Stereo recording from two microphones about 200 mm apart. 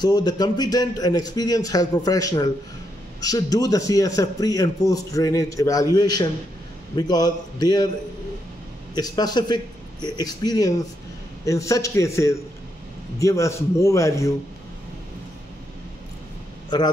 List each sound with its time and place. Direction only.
0.0 s a man's voice: 20° left (ahead or behind)
8.9 s a man's voice: 20° left (ahead or behind)
16.7 s a man's voice: 20° left (ahead or behind)